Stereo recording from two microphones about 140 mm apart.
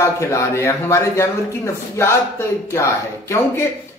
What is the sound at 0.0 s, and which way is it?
Speech, 20° left (ahead or behind).